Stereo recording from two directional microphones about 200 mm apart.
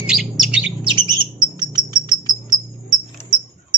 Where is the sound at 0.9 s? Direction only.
20° right (ahead or behind).